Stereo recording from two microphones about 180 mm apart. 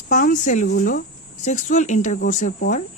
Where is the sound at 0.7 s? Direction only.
55° left (ahead or behind).